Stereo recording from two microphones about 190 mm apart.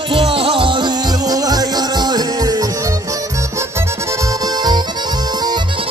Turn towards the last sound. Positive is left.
turn(degrees=-20)  # may be behind; listen again after turning